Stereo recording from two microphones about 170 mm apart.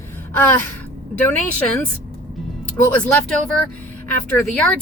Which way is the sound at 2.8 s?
10° left (ahead or behind).